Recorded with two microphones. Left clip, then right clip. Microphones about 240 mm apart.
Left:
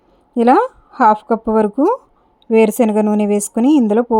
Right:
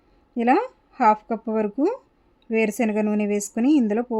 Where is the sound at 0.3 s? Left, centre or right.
Left.